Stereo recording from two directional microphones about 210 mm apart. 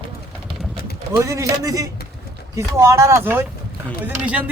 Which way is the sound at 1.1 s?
15° right (ahead or behind).